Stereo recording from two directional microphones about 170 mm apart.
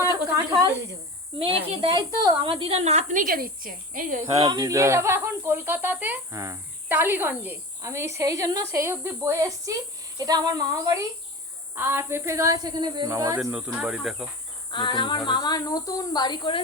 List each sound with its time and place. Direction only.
1.4 s a woman's voice: 35° right (ahead or behind); by 4.2 s 55° right (ahead or behind)
4.4 s a woman's voice: 20° right (ahead or behind)
13.4 s speech: 5° right (ahead or behind)
14.7 s speech: 30° left (ahead or behind)